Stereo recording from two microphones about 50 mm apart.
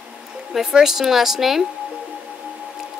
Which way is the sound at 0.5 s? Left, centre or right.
Centre.